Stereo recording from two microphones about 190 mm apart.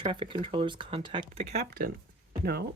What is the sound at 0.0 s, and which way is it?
A child's voice, 25° right (ahead or behind).